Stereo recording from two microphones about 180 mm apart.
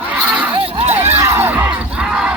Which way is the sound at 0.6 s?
30° right (ahead or behind).